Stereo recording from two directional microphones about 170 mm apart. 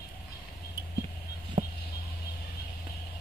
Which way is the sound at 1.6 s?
40° right (ahead or behind).